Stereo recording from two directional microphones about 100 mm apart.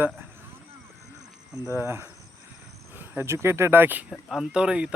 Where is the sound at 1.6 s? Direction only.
25° right (ahead or behind).